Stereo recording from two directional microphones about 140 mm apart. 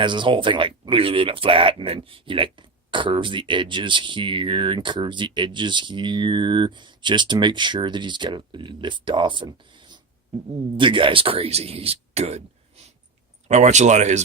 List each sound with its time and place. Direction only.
0.0 s speech: 35° right (ahead or behind); by 14.2 s 55° right (ahead or behind)